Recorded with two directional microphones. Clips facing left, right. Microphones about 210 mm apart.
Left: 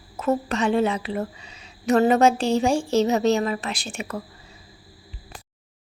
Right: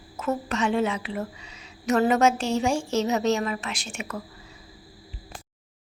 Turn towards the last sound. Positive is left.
turn(degrees=35)  # may be behind; listen again after turning